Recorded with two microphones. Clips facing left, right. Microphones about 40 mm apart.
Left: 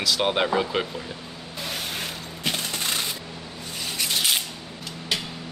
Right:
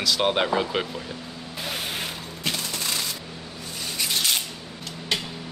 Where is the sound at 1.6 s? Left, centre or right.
Centre.